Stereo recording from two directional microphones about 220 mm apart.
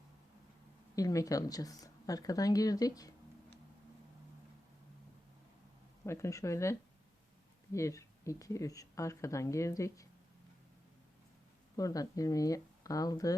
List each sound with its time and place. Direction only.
0.9 s speech: 15° left (ahead or behind)
6.1 s speech: 15° left (ahead or behind)
11.8 s speech: 15° left (ahead or behind)